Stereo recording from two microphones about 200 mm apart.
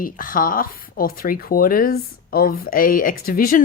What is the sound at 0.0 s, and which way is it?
A woman's voice, 45° left (ahead or behind).